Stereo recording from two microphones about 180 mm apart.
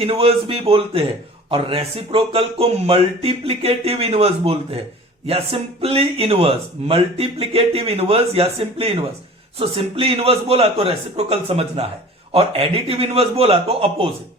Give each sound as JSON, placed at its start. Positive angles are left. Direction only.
{"t": 0.0, "sound": "speech", "side_deg": -35}